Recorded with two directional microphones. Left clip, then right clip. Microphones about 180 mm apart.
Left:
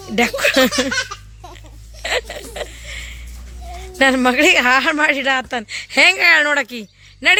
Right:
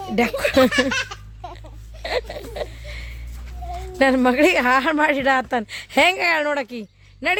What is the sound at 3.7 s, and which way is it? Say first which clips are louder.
A man's voice: left 3 dB; centre (ahead or behind).